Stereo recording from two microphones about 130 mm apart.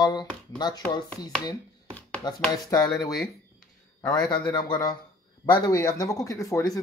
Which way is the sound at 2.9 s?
Centre (ahead or behind).